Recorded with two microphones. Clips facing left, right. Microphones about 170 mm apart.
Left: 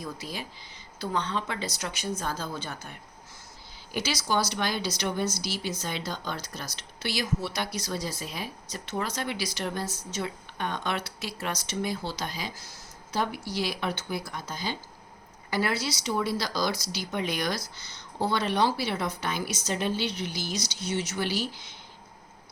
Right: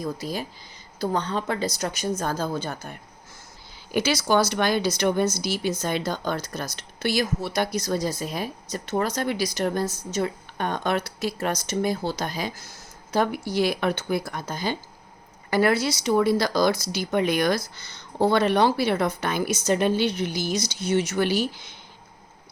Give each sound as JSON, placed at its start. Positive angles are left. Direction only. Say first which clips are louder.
{"t": 0.0, "sound": "speech", "louder": "right 7 dB", "side_deg": -40}
{"t": 3.9, "sound": "speech", "louder": "right 7 dB", "side_deg": -55}